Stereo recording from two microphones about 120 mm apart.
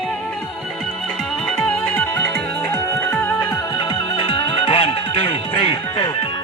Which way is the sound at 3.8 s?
45° left (ahead or behind).